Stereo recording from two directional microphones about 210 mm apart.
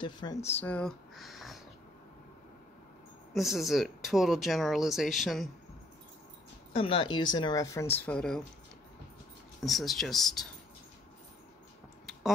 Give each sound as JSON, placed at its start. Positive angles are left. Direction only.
{"t": 0.0, "sound": "speech", "side_deg": 20}
{"t": 3.3, "sound": "speech", "side_deg": 0}
{"t": 6.7, "sound": "speech", "side_deg": 25}
{"t": 9.6, "sound": "speech", "side_deg": 0}